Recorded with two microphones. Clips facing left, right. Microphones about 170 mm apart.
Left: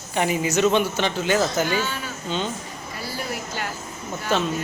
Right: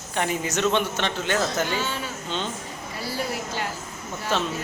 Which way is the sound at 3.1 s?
30° right (ahead or behind).